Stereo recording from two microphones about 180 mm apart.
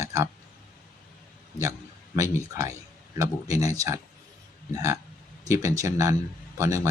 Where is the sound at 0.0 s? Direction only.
15° right (ahead or behind).